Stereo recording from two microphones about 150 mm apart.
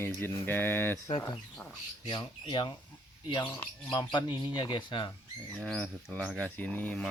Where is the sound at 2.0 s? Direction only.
30° left (ahead or behind).